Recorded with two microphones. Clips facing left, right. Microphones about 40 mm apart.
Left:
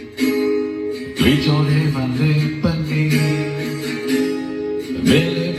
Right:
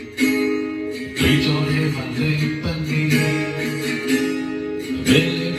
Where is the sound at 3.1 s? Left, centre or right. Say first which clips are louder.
Right 1 dB; right.